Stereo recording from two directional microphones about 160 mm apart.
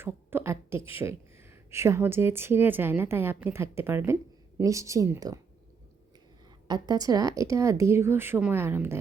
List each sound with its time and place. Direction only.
0.0 s a sound: 15° right (ahead or behind)
0.9 s a woman's voice: 15° right (ahead or behind)
6.7 s speech: 25° right (ahead or behind)